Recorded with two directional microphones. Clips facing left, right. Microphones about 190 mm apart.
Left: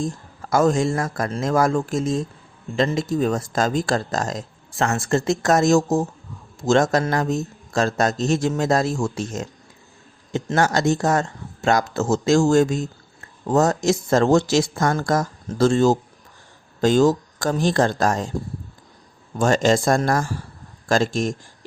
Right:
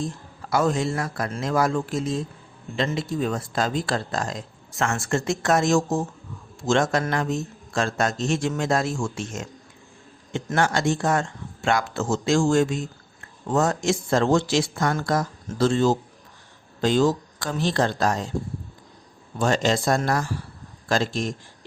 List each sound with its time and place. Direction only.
0.5 s speech: 45° left (ahead or behind)
19.4 s speech: 45° left (ahead or behind)